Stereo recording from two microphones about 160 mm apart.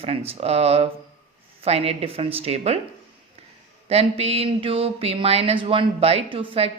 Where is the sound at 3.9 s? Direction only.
40° right (ahead or behind).